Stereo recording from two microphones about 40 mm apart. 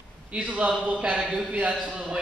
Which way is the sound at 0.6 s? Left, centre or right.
Right.